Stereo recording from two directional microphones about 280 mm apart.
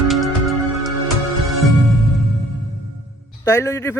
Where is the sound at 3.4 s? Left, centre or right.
Centre.